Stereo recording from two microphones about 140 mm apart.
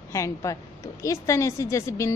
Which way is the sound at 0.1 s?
25° left (ahead or behind).